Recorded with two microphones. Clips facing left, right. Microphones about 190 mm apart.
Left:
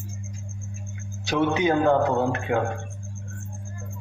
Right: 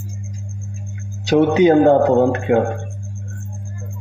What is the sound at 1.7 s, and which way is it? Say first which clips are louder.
Speech: right 9 dB; 40° right (ahead or behind).